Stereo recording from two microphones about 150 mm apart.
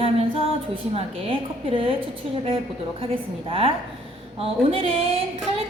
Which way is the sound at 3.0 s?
40° right (ahead or behind).